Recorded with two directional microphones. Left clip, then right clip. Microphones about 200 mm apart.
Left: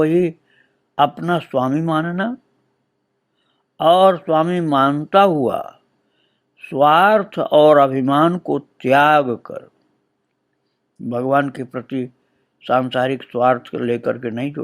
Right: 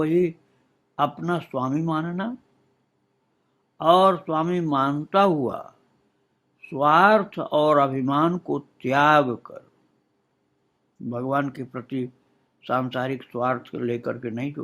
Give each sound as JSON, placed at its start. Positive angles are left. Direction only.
{"t": 0.0, "sound": "speech", "side_deg": 25}
{"t": 3.8, "sound": "speech", "side_deg": 30}
{"t": 11.1, "sound": "speech", "side_deg": 25}